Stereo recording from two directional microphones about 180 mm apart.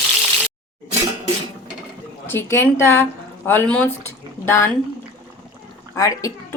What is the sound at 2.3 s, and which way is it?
A woman's voice, 15° left (ahead or behind).